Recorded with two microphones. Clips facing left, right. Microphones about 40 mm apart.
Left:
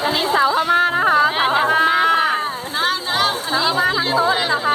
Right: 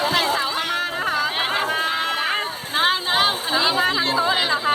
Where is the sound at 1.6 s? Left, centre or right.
Centre.